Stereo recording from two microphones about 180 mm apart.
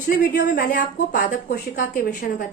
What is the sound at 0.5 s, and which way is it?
A woman's voice, 50° left (ahead or behind).